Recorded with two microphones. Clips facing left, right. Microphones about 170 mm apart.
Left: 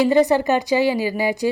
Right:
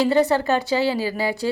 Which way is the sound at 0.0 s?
15° left (ahead or behind).